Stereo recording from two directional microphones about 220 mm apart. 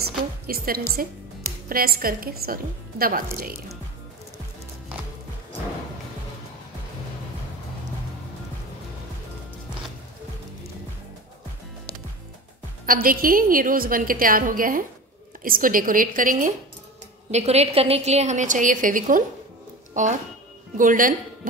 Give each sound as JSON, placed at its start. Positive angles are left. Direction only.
{"t": 0.5, "sound": "a woman's voice", "side_deg": -45}
{"t": 12.8, "sound": "a woman's voice", "side_deg": -40}